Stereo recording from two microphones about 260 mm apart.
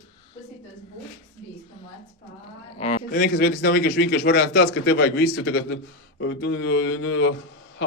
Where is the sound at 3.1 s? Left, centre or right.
Left.